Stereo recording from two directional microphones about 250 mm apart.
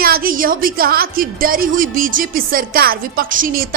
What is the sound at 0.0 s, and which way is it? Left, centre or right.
A woman's voice, right.